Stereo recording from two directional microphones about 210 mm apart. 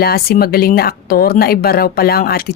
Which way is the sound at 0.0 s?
45° left (ahead or behind).